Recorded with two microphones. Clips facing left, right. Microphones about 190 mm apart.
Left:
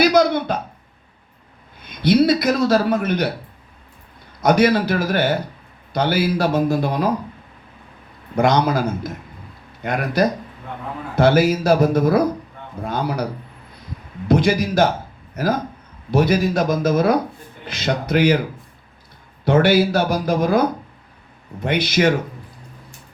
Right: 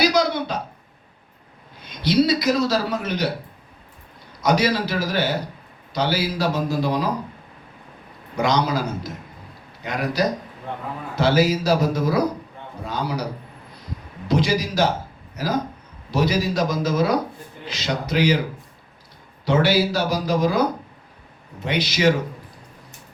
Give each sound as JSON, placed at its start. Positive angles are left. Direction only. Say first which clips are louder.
{"t": 0.0, "sound": "a sound", "louder": "left 4 dB", "side_deg": 55}
{"t": 1.8, "sound": "a man's voice", "louder": "left 3 dB", "side_deg": 55}
{"t": 4.4, "sound": "a man's voice", "louder": "left 5 dB", "side_deg": 55}
{"t": 8.4, "sound": "a man's voice", "louder": "left 4 dB", "side_deg": 55}
{"t": 14.3, "sound": "a man's voice", "louder": "left 4 dB", "side_deg": 55}
{"t": 19.5, "sound": "a man's voice", "louder": "left 4 dB", "side_deg": 55}